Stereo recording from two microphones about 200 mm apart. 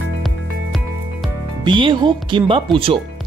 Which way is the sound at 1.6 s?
25° right (ahead or behind).